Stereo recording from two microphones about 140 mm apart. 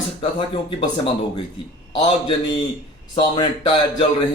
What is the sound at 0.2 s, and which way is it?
Speech, 35° left (ahead or behind).